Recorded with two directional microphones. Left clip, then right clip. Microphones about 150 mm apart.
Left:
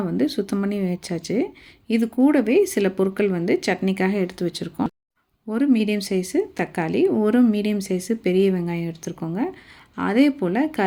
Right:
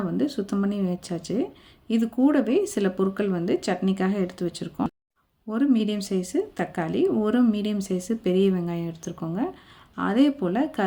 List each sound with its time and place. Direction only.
0.2 s speech: 20° left (ahead or behind)